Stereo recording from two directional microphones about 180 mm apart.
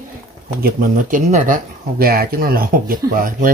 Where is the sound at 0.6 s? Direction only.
55° right (ahead or behind).